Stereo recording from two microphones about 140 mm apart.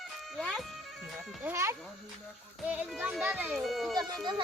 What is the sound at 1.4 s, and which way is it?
Speech, 20° right (ahead or behind).